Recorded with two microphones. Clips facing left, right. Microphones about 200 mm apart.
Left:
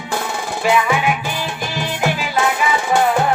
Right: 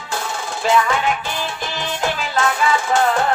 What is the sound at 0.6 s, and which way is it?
Music, 10° left (ahead or behind).